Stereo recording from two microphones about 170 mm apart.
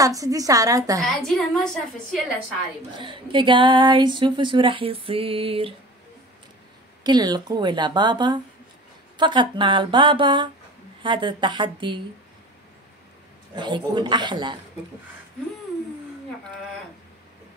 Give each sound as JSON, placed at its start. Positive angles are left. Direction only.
{"t": 0.0, "sound": "speech", "side_deg": -20}
{"t": 1.0, "sound": "a woman's voice", "side_deg": 0}
{"t": 3.0, "sound": "speech", "side_deg": -30}
{"t": 7.0, "sound": "speech", "side_deg": -25}
{"t": 13.6, "sound": "speech", "side_deg": -25}